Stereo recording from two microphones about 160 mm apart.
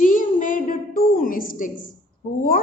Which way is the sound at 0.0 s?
55° left (ahead or behind).